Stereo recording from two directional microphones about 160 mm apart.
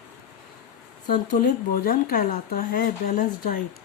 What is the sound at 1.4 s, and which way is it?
Speech, 65° left (ahead or behind).